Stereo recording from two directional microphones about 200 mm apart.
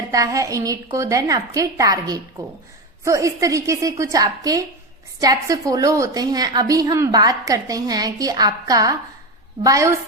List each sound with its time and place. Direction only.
0.1 s a woman's voice: 15° right (ahead or behind)